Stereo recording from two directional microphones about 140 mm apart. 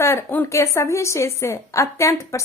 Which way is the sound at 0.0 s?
20° left (ahead or behind).